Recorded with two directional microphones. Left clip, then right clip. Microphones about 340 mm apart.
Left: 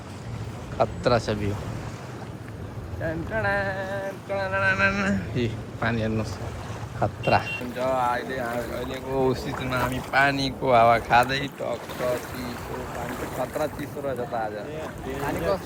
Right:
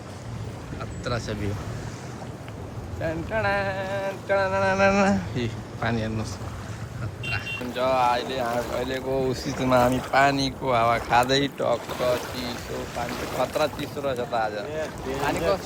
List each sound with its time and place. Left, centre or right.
0.8 s speech: centre
3.0 s speech: centre
4.3 s speech: centre
7.9 s speech: centre
11.3 s speech: centre
13.4 s speech: centre